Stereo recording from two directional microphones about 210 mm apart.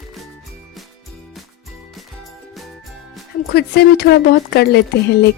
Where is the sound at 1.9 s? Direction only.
Centre (ahead or behind).